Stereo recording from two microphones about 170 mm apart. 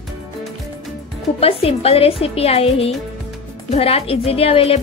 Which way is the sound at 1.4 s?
35° left (ahead or behind).